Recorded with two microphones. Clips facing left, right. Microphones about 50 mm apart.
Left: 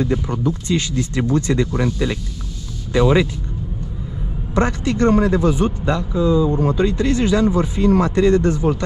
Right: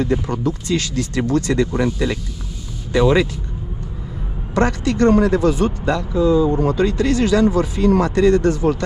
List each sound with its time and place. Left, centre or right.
0.7 s speech: left
1.7 s speech: centre
2.9 s speech: left
4.6 s speech: left
6.1 s speech: right
6.8 s speech: left